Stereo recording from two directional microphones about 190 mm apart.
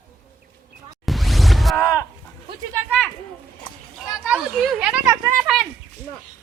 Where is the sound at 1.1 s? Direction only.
Centre (ahead or behind).